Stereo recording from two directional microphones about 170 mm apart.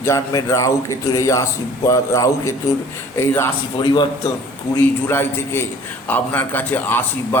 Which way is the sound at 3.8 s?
25° left (ahead or behind).